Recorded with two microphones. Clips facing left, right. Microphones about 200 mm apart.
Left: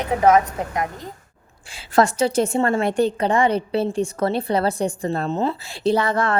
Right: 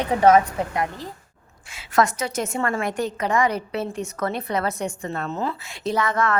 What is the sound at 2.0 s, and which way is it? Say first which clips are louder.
A woman's voice: left 5 dB; 30° left (ahead or behind).